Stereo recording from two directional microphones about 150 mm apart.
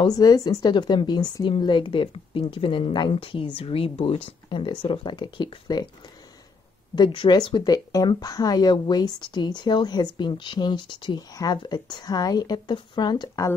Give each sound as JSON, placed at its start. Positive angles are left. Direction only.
{"t": 0.0, "sound": "speech", "side_deg": 25}
{"t": 7.0, "sound": "speech", "side_deg": 30}